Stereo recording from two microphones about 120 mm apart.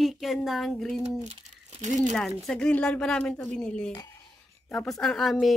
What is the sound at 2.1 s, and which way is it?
Speech, 5° left (ahead or behind).